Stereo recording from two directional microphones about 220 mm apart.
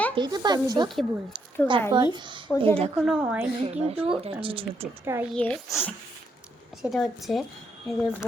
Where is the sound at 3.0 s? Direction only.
5° right (ahead or behind).